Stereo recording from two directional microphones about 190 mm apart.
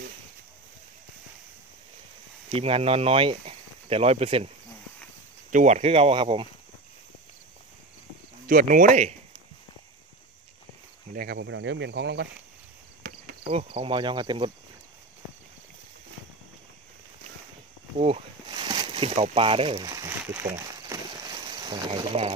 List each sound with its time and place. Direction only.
2.5 s speech: 30° right (ahead or behind)
5.5 s speech: 40° right (ahead or behind)
8.5 s speech: 45° right (ahead or behind)
11.3 s speech: 75° right (ahead or behind)
13.5 s cricket: 30° right (ahead or behind)
17.9 s a sound: 30° right (ahead or behind)